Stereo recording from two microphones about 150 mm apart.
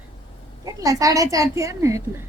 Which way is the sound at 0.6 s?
25° right (ahead or behind).